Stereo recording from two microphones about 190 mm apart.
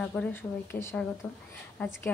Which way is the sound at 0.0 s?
5° left (ahead or behind).